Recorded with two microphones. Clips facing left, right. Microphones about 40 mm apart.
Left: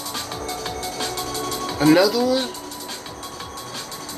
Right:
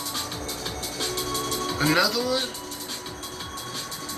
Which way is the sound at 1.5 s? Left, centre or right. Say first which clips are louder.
Left 1 dB; left.